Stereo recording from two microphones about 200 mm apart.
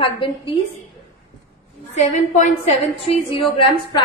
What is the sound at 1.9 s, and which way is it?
A woman's voice, 35° left (ahead or behind).